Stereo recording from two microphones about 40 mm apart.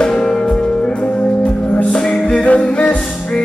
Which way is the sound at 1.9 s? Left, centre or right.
Left.